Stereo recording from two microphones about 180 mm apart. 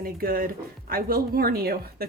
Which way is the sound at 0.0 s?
55° right (ahead or behind).